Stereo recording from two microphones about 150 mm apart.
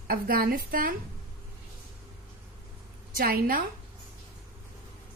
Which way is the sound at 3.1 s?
80° right.